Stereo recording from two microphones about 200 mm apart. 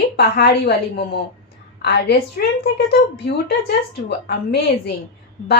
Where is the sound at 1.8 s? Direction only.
55° left (ahead or behind).